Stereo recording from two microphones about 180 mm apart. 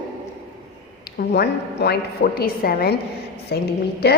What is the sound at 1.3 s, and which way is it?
A woman's voice, 65° left (ahead or behind).